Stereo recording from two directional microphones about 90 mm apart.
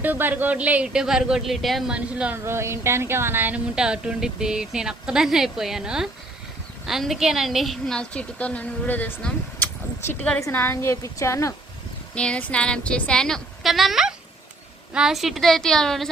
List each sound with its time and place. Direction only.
0.0 s a woman's voice: 20° right (ahead or behind); by 1.9 s centre (ahead or behind)
1.9 s a woman's voice: 10° right (ahead or behind)
2.3 s speech: 30° right (ahead or behind)
3.8 s a woman's voice: 10° right (ahead or behind); by 11.5 s 35° left (ahead or behind)
12.1 s a woman's voice: 10° left (ahead or behind)